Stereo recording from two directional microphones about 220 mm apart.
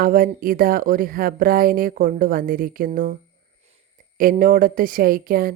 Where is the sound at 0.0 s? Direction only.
40° right (ahead or behind).